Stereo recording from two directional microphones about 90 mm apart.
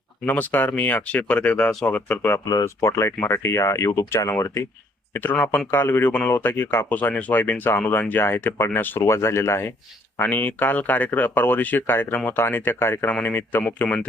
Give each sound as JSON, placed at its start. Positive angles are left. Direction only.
{"t": 0.3, "sound": "speech", "side_deg": 20}
{"t": 2.4, "sound": "speech", "side_deg": 45}
{"t": 5.1, "sound": "speech", "side_deg": 20}